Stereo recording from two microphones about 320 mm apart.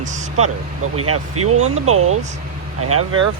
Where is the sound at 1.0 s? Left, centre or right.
Right.